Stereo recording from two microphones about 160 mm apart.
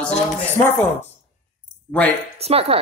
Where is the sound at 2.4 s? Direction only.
40° right (ahead or behind).